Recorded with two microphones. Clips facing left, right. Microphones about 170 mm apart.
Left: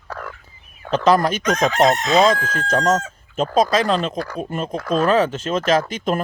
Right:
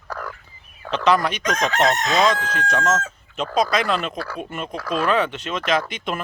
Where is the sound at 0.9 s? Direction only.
40° left (ahead or behind).